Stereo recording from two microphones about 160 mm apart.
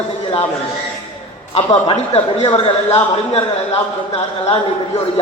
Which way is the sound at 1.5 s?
35° left (ahead or behind).